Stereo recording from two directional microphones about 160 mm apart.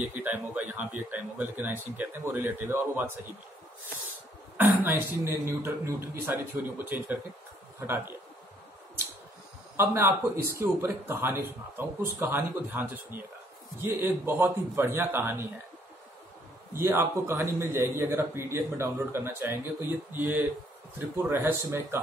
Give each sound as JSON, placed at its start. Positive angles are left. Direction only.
{"t": 0.0, "sound": "a man's voice", "side_deg": -10}
{"t": 4.6, "sound": "a man's voice", "side_deg": -15}
{"t": 9.8, "sound": "a man's voice", "side_deg": -15}
{"t": 16.7, "sound": "a man's voice", "side_deg": -15}